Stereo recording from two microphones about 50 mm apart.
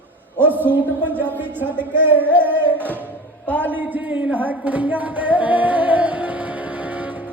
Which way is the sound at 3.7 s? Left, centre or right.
Right.